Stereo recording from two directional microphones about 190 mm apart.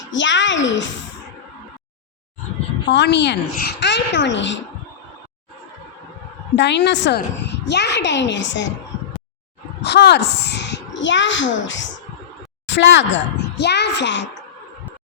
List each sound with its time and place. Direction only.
0.1 s a child's voice: 75° left (ahead or behind)
2.9 s a child's voice: 65° left (ahead or behind)
6.6 s a child's voice: 65° left (ahead or behind)
9.8 s a child's voice: 60° left (ahead or behind)